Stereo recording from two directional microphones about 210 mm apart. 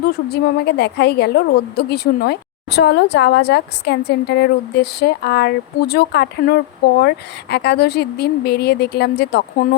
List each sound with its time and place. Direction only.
0.1 s a woman's voice: 50° left (ahead or behind)